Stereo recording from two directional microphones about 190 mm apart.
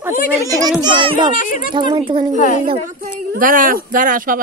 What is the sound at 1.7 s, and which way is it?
Speech, 25° right (ahead or behind).